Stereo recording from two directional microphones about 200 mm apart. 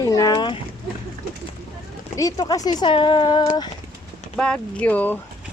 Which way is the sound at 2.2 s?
20° left (ahead or behind).